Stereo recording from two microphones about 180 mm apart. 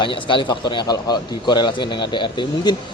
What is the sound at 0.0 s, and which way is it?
Speech, 25° left (ahead or behind).